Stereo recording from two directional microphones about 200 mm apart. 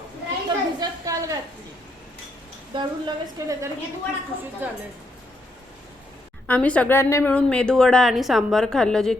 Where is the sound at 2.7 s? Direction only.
20° right (ahead or behind).